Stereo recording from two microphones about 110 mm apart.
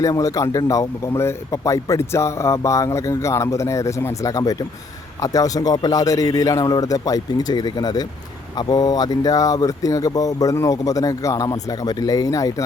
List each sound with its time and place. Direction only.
0.0 s speech: 30° left (ahead or behind)